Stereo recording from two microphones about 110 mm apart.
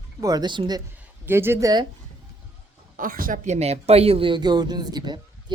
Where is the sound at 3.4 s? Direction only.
80° right.